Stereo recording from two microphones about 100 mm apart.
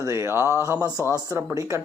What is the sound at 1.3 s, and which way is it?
Speech, 30° right (ahead or behind).